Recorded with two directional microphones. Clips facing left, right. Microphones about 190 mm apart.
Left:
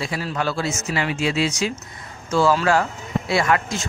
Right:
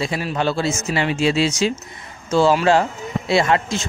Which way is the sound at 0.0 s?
20° right (ahead or behind).